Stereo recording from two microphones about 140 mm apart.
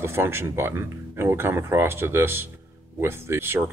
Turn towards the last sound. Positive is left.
turn(degrees=-15)  # may be behind; listen again after turning